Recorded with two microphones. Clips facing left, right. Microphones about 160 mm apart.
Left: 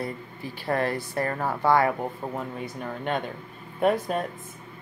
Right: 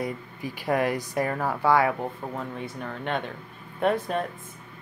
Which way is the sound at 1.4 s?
10° left (ahead or behind).